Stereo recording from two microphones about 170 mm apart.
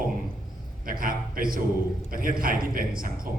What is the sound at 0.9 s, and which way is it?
A man's voice, 55° right (ahead or behind).